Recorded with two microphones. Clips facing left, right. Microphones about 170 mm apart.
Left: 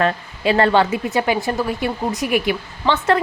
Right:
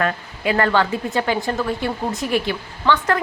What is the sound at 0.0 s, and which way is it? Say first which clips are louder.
Speech: left 3 dB; 25° left (ahead or behind).